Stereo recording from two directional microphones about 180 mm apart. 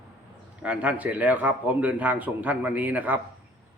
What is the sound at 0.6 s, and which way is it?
A man's voice, 10° right (ahead or behind).